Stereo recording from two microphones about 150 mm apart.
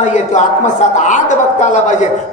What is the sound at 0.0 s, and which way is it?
A woman's voice, 50° left (ahead or behind).